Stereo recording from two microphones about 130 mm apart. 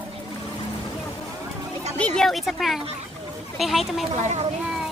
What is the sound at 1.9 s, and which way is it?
A woman's voice, 5° left (ahead or behind).